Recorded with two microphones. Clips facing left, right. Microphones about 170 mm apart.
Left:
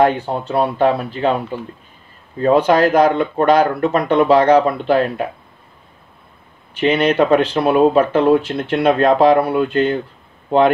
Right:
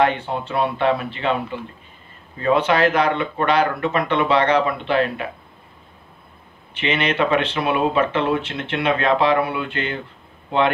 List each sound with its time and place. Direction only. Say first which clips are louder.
0.0 s speech: left 4 dB; 40° left (ahead or behind)
6.8 s speech: left 7 dB; 40° left (ahead or behind)